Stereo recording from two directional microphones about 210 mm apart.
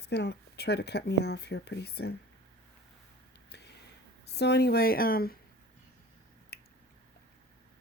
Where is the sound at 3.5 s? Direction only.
55° left (ahead or behind).